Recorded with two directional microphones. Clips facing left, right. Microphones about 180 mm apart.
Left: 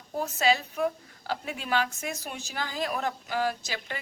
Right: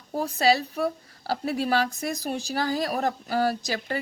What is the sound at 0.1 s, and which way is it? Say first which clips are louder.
A woman's voice: right 3 dB; 35° right (ahead or behind).